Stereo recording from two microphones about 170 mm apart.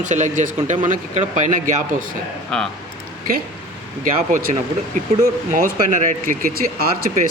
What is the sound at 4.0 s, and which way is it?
Speech, 50° right (ahead or behind).